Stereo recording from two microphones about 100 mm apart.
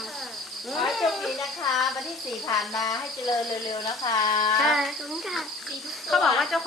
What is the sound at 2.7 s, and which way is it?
Speech, 35° left (ahead or behind).